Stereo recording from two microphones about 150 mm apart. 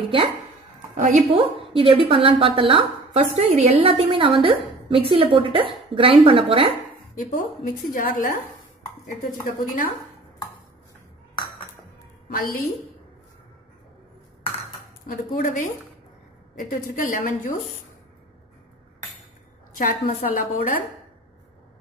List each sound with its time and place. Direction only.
0.9 s a woman's voice: 50° right (ahead or behind)
1.3 s speech: 40° right (ahead or behind)
3.8 s speech: 35° right (ahead or behind)
7.2 s a woman's voice: 60° left (ahead or behind)
12.4 s a woman's voice: 70° left (ahead or behind)
15.0 s a woman's voice: 60° left (ahead or behind)
19.8 s a woman's voice: 55° left (ahead or behind)